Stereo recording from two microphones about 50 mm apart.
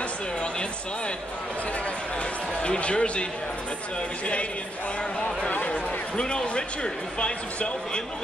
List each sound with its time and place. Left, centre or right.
2.6 s speech: left
5.7 s speech: centre